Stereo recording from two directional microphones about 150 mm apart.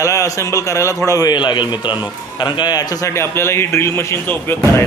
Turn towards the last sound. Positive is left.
turn(degrees=15)  # may be behind; listen again after turning